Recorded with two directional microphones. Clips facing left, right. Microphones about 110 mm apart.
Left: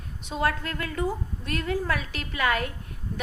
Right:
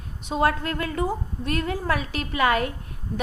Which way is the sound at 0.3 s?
30° right (ahead or behind).